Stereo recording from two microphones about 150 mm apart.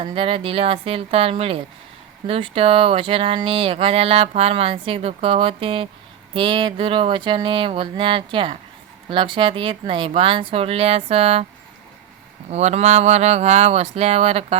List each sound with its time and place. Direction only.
0.0 s speech: 35° right (ahead or behind)
12.5 s speech: 45° right (ahead or behind)